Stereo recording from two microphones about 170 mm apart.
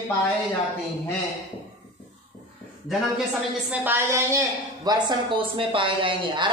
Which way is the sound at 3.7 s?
10° right (ahead or behind).